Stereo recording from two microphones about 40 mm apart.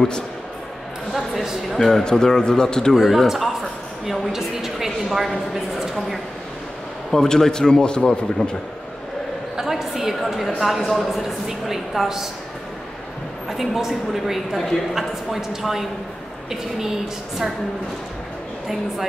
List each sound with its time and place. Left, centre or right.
1.1 s speech: centre
2.0 s a man's voice: centre
2.9 s a woman's voice: centre
7.1 s a man's voice: centre
9.6 s a sound: centre
10.6 s a woman's voice: centre
13.5 s a woman's voice: centre